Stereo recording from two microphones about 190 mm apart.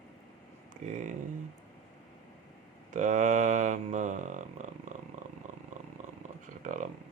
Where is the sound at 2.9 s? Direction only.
40° right (ahead or behind).